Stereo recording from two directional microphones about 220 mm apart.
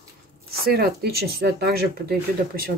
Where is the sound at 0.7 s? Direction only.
45° right (ahead or behind).